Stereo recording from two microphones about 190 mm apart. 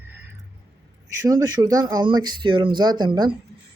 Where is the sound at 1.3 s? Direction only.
20° right (ahead or behind).